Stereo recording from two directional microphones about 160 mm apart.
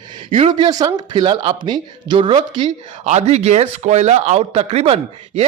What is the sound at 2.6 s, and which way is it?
Speech, 45° right (ahead or behind).